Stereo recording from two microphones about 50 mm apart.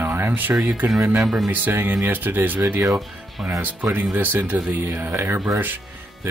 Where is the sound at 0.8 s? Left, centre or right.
Right.